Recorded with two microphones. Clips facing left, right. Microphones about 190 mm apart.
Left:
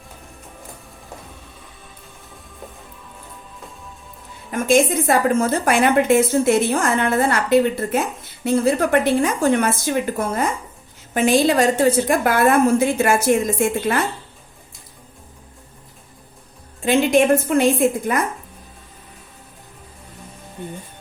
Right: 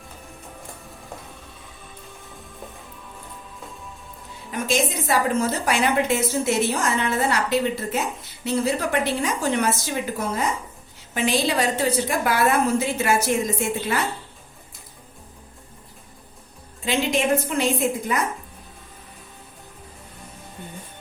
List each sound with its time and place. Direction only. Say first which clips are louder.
4.5 s a woman's voice: left 7 dB; 55° left (ahead or behind)
16.8 s a woman's voice: left 7 dB; 55° left (ahead or behind)